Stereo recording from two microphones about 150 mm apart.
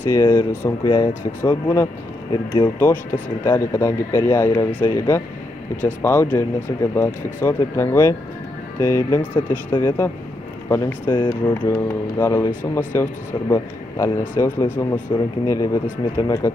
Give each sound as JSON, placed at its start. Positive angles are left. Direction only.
{"t": 0.1, "sound": "speech", "side_deg": 20}
{"t": 11.1, "sound": "speech", "side_deg": 25}
{"t": 11.5, "sound": "speech", "side_deg": 15}